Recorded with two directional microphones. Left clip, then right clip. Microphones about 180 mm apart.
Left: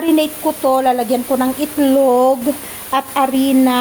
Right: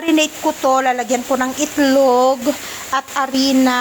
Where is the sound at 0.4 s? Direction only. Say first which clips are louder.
Even; 15° right (ahead or behind).